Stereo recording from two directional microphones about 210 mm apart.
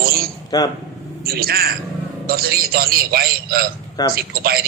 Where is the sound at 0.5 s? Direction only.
15° left (ahead or behind).